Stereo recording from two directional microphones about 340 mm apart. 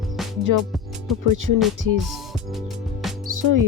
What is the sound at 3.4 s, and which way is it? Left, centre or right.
Speech, right.